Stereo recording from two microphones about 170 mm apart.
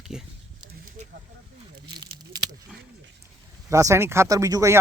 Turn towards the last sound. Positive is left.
turn(degrees=-20)  # may be behind; listen again after turning